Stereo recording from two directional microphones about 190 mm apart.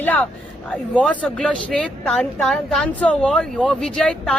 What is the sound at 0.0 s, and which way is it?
Speech, 10° left (ahead or behind).